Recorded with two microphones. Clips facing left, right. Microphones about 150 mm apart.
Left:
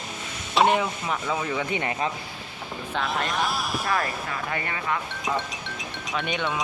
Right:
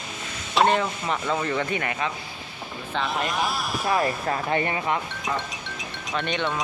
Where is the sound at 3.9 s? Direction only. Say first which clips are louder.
Right 6 dB; 25° right (ahead or behind).